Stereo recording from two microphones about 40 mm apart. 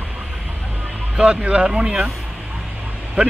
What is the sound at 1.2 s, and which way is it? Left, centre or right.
Speech, right.